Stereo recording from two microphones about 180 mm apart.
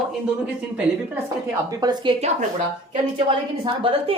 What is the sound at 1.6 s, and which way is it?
Speech, 20° right (ahead or behind).